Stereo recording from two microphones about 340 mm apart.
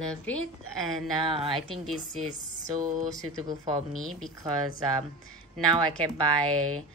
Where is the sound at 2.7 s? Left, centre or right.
Right.